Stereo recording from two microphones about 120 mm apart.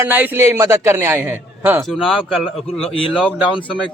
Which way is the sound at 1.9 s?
5° right (ahead or behind).